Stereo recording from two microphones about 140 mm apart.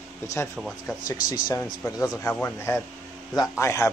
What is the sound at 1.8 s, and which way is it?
A man's voice, 20° left (ahead or behind).